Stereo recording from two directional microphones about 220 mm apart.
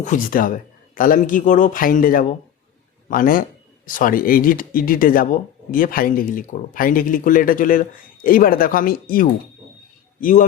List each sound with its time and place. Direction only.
0.0 s a man's voice: 35° left (ahead or behind)